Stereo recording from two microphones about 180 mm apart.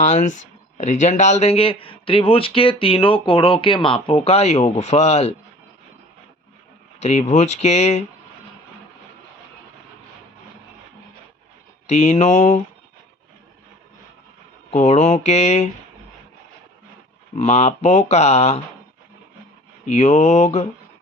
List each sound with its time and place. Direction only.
0.0 s speech: 40° left (ahead or behind)
7.0 s speech: 40° left (ahead or behind)
11.9 s speech: 40° left (ahead or behind)
14.7 s speech: 40° left (ahead or behind)
17.3 s speech: 35° left (ahead or behind)
19.8 s speech: 40° left (ahead or behind)